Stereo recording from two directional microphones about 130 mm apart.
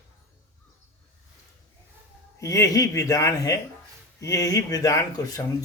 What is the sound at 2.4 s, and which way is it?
Speech, 25° left (ahead or behind).